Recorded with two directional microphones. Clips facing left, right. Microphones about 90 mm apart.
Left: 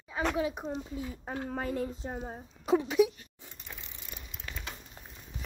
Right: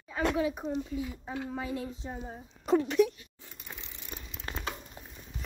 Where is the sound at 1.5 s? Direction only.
50° left (ahead or behind).